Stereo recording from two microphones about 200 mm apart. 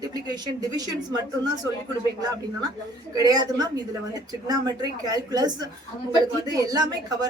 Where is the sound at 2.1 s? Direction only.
20° right (ahead or behind).